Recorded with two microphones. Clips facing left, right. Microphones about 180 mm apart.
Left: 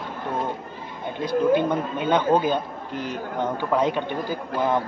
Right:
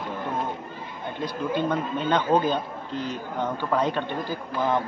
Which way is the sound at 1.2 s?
10° left (ahead or behind).